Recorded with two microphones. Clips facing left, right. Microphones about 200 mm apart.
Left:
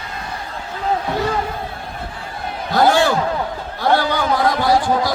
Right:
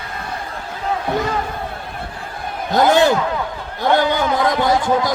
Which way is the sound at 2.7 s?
20° right (ahead or behind).